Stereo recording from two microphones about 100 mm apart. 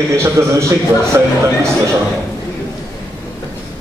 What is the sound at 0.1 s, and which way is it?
A man's voice, 30° right (ahead or behind).